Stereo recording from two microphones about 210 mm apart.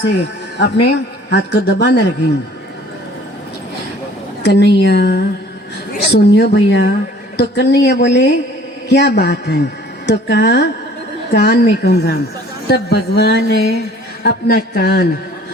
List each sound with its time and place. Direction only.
0.6 s a man's voice: 50° left (ahead or behind)
4.4 s a man's voice: 55° left (ahead or behind)